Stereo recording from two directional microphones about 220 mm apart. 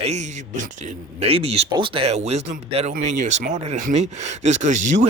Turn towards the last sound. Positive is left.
turn(degrees=-35)  # may be behind; listen again after turning